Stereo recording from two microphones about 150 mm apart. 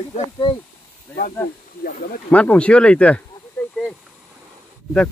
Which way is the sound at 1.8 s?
75° left (ahead or behind).